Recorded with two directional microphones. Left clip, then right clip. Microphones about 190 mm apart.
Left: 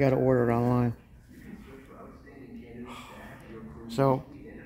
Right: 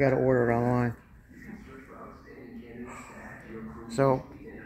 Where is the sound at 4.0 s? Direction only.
10° left (ahead or behind).